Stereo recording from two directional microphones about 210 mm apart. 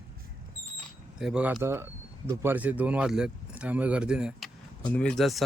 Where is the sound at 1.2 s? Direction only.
5° right (ahead or behind).